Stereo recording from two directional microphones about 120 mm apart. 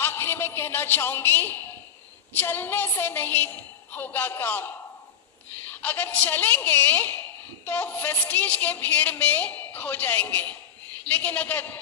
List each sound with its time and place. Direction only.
0.0 s a woman's voice: 20° left (ahead or behind)